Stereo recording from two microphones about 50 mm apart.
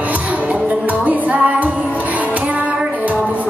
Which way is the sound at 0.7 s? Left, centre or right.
Right.